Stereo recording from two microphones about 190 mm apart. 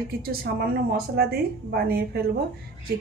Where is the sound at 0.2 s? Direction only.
55° right (ahead or behind).